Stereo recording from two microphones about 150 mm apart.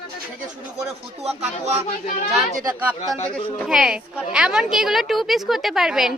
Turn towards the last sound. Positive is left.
turn(degrees=-5)  # may be behind; listen again after turning